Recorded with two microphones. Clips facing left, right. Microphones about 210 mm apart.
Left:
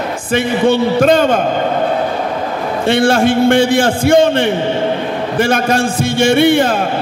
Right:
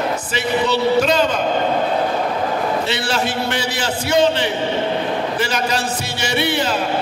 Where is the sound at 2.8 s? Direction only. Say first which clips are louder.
Left 10 dB; 50° left (ahead or behind).